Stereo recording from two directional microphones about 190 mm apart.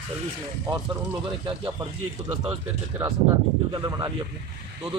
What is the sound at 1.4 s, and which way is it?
Speech, 25° right (ahead or behind).